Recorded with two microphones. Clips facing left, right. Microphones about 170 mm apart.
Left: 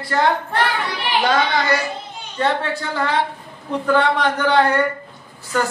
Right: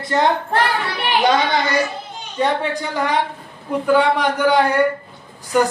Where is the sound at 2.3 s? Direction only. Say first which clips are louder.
Right 1 dB; 15° right (ahead or behind).